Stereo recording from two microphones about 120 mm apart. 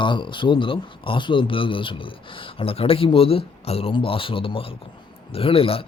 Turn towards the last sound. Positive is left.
turn(degrees=50)  # may be behind; listen again after turning